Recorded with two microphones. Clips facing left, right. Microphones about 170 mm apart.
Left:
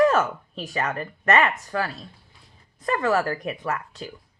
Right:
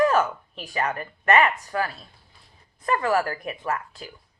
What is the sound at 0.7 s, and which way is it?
Speech, 35° left (ahead or behind).